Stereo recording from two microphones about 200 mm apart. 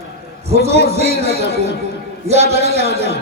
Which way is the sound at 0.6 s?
30° right (ahead or behind).